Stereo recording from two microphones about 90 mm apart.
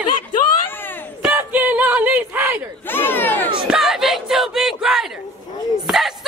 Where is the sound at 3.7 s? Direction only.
5° right (ahead or behind).